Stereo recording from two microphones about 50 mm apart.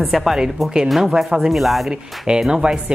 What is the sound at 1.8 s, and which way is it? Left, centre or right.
Speech, centre.